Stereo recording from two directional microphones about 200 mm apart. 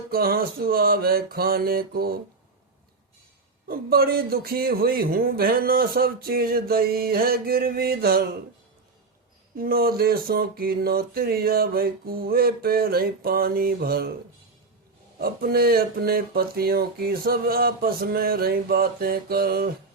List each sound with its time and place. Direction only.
0.1 s a man's voice: 50° right (ahead or behind)
3.7 s a man's voice: 50° right (ahead or behind)
9.6 s a man's voice: 50° right (ahead or behind)
15.2 s a man's voice: 50° right (ahead or behind)